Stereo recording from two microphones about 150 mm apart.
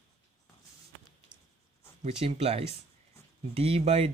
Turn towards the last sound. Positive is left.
turn(degrees=-40)  # may be behind; listen again after turning